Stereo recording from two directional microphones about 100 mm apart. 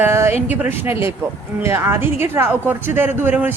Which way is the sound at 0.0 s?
25° right (ahead or behind).